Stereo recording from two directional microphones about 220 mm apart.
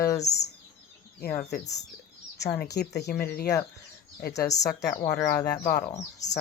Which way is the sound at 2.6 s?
50° left (ahead or behind).